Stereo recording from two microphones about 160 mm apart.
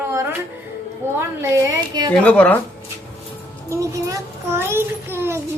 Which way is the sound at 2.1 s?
10° left (ahead or behind).